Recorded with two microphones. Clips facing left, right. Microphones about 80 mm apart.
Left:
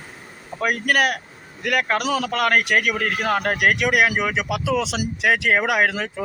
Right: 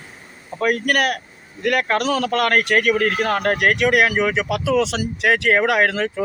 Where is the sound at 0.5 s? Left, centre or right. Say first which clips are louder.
Right 1 dB; centre.